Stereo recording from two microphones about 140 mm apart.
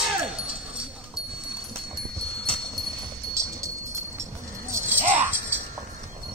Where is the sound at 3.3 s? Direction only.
20° right (ahead or behind).